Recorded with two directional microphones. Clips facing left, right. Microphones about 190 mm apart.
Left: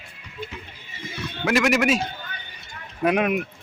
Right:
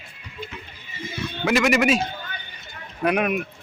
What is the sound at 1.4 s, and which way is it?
Speech, centre (ahead or behind).